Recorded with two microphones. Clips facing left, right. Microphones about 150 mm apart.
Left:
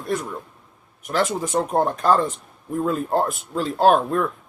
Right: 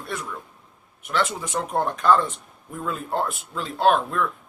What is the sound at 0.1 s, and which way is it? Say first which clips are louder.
Speech: left 8 dB; 35° left (ahead or behind).